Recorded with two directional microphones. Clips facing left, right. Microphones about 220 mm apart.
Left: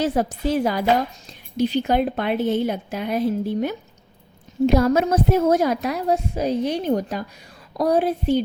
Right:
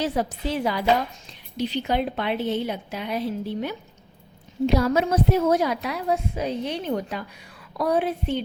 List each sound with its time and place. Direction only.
0.0 s a woman's voice: 50° left (ahead or behind)